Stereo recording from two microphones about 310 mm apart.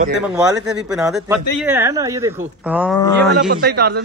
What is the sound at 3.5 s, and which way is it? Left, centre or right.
Speech, right.